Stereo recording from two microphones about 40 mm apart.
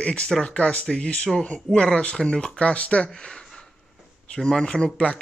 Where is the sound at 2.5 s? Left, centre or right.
Left.